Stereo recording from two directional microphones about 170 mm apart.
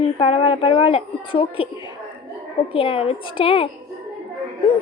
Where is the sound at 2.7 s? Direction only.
30° left (ahead or behind).